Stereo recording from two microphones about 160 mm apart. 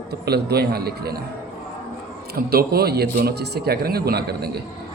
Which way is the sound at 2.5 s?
75° right (ahead or behind).